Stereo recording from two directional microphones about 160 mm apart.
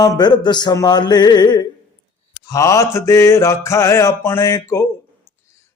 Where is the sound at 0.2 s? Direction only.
25° left (ahead or behind).